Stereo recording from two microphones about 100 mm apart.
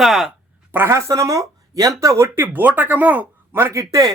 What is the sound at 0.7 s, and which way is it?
Speech, 25° right (ahead or behind).